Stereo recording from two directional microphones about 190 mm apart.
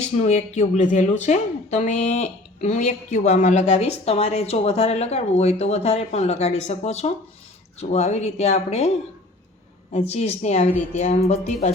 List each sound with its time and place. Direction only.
0.0 s a woman's voice: 35° left (ahead or behind)
9.9 s a woman's voice: 35° left (ahead or behind)